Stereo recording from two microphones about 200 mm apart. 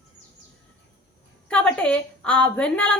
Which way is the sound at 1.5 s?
5° left (ahead or behind).